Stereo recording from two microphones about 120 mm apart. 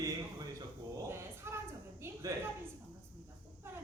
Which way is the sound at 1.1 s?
20° right (ahead or behind).